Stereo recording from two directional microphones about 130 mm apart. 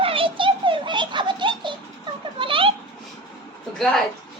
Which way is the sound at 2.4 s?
40° right (ahead or behind).